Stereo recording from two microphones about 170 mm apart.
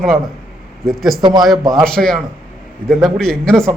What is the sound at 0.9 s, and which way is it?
A man's voice, centre (ahead or behind).